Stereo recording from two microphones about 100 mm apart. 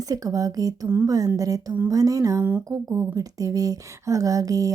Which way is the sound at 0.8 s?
20° right (ahead or behind).